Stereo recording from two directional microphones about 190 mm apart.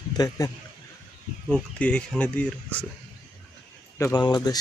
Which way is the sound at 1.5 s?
5° left (ahead or behind).